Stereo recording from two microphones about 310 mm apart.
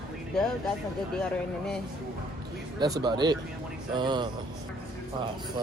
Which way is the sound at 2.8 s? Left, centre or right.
Centre.